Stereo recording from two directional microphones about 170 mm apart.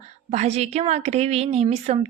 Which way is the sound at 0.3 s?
40° right (ahead or behind).